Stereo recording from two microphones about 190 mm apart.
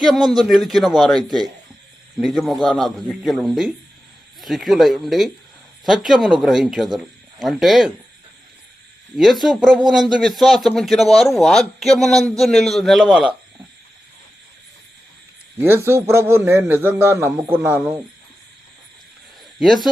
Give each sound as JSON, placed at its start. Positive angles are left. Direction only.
{"t": 0.0, "sound": "speech", "side_deg": 0}
{"t": 9.1, "sound": "speech", "side_deg": 0}
{"t": 15.5, "sound": "a man's voice", "side_deg": -10}
{"t": 19.5, "sound": "speech", "side_deg": 0}